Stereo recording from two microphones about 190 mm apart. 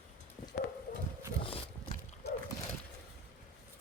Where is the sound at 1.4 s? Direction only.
30° left (ahead or behind).